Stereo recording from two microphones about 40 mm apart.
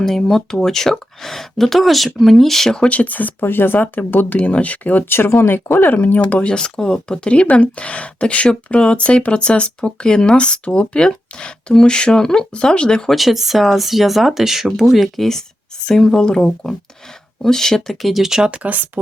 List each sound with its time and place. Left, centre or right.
0.0 s speech: centre
2.9 s speech: left
3.4 s speech: left
5.0 s speech: left
6.1 s speech: left
6.5 s speech: left
7.5 s speech: left
13.1 s speech: centre
18.0 s speech: centre
18.5 s speech: right